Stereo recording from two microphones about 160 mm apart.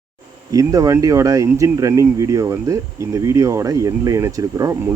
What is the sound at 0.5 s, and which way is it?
Speech, 20° right (ahead or behind).